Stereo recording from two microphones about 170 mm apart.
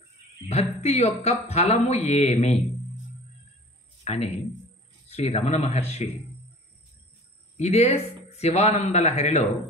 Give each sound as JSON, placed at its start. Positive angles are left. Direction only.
{"t": 0.5, "sound": "speech", "side_deg": 40}
{"t": 4.0, "sound": "a sound", "side_deg": 40}
{"t": 5.0, "sound": "speech", "side_deg": 40}
{"t": 7.5, "sound": "speech", "side_deg": 40}